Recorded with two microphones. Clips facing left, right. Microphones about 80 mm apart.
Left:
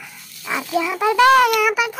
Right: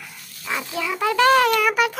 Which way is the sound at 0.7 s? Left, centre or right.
Centre.